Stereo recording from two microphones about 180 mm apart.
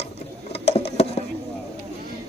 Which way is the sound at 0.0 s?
35° left (ahead or behind).